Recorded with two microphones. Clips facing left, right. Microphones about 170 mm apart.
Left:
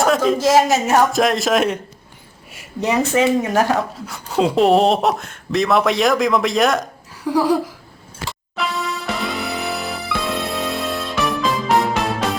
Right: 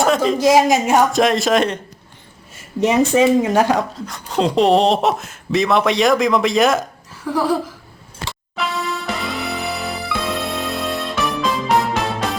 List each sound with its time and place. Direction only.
0.0 s a woman's voice: centre (ahead or behind)
0.3 s speech: 15° right (ahead or behind)
0.9 s speech: centre (ahead or behind)
2.8 s speech: 20° right (ahead or behind)
4.0 s speech: 5° left (ahead or behind)
7.3 s laughter: 15° left (ahead or behind)
8.2 s music: centre (ahead or behind)